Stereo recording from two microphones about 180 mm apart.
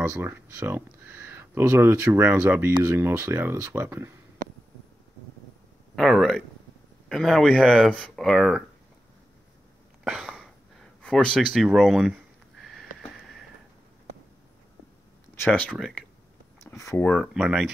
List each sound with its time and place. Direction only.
0.0 s speech: 10° right (ahead or behind)
5.9 s speech: centre (ahead or behind)
10.0 s a sound: centre (ahead or behind)
15.3 s speech: 10° left (ahead or behind)
15.7 s speech: centre (ahead or behind)
16.6 s speech: 15° left (ahead or behind)
17.3 s speech: 5° right (ahead or behind)